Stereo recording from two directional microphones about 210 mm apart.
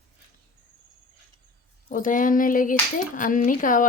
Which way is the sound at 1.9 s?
40° left (ahead or behind).